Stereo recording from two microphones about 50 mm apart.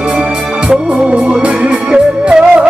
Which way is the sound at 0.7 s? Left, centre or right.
Right.